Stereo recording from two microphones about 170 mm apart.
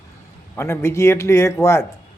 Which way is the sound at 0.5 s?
15° left (ahead or behind).